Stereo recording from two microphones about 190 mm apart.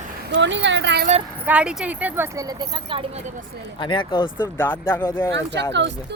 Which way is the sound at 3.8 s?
25° left (ahead or behind).